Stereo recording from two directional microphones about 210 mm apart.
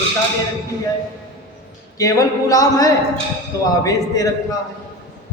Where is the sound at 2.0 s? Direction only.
15° left (ahead or behind).